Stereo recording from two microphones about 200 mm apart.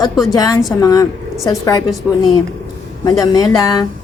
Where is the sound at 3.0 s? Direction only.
20° left (ahead or behind).